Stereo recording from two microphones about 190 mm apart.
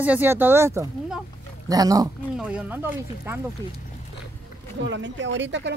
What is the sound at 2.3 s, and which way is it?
Speech, 10° right (ahead or behind).